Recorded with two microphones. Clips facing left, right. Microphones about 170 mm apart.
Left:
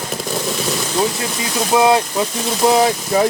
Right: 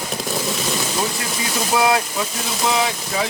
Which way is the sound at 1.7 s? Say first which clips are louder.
Left 5 dB; 25° left (ahead or behind).